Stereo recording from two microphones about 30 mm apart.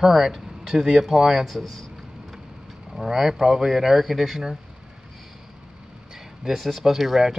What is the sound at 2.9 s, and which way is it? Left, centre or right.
Speech, centre.